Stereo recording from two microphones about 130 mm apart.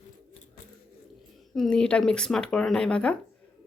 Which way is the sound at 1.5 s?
5° left (ahead or behind).